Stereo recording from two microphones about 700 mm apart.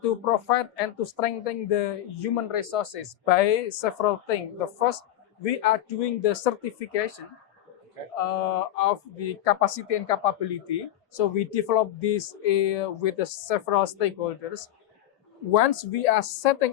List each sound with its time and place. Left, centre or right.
0.0 s speech: left
8.1 s speech: left